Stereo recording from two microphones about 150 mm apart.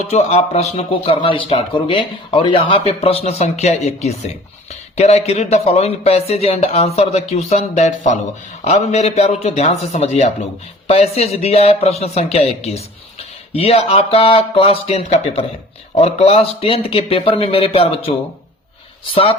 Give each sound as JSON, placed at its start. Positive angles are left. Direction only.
{"t": 0.1, "sound": "speech", "side_deg": 45}